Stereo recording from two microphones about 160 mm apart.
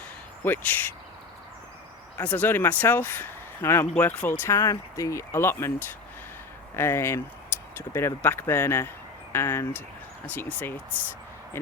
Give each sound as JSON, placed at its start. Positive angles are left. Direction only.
{"t": 0.4, "sound": "speech", "side_deg": 10}
{"t": 2.1, "sound": "speech", "side_deg": 10}
{"t": 6.7, "sound": "speech", "side_deg": 15}